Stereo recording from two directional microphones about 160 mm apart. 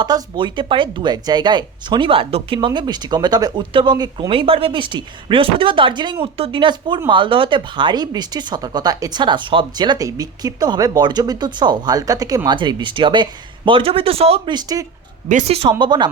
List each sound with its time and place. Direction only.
0.0 s speech: 30° right (ahead or behind)
15.3 s speech: 45° right (ahead or behind)
15.8 s speech: 30° right (ahead or behind)